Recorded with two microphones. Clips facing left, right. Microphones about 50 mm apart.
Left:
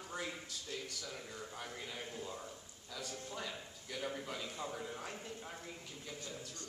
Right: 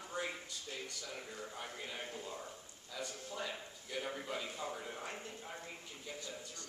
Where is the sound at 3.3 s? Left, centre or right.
Centre.